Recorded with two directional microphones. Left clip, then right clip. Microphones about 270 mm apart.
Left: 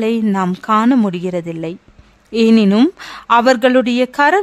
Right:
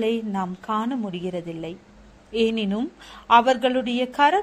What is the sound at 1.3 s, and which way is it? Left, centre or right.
Speech, left.